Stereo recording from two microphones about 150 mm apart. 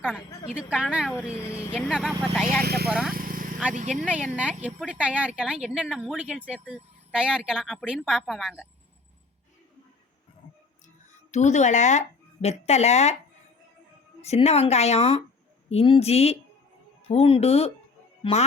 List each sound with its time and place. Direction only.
0.7 s speech: 5° right (ahead or behind)
1.4 s speech: 20° left (ahead or behind)
1.9 s speech: centre (ahead or behind)
2.5 s speech: 90° right
3.1 s vehicle: 70° right (ahead or behind)
4.0 s speech: 10° right (ahead or behind)
11.3 s speech: 50° left (ahead or behind)
14.2 s speech: 45° left (ahead or behind)